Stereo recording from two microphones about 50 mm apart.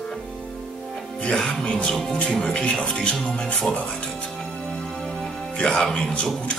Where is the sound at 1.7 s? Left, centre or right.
Centre.